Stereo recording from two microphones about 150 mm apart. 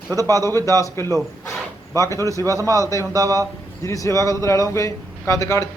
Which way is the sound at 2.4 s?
20° right (ahead or behind).